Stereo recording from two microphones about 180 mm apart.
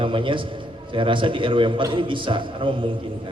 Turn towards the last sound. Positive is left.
turn(degrees=-25)  # may be behind; listen again after turning